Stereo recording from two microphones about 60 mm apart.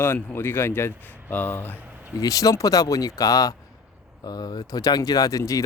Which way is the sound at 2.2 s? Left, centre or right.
Left.